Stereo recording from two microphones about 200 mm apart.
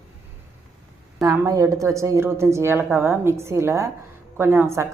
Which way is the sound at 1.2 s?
15° right (ahead or behind).